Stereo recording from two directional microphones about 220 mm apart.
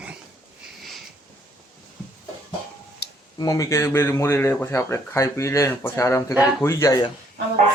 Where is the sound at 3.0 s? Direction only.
50° left (ahead or behind).